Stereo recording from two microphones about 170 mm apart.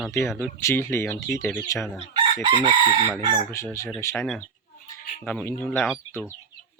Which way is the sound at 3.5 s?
15° left (ahead or behind).